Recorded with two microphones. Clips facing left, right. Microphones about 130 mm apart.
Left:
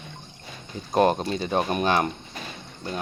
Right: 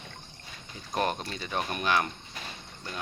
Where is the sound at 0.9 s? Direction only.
30° left (ahead or behind).